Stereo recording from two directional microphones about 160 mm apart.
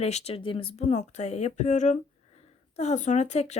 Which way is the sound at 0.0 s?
40° left (ahead or behind).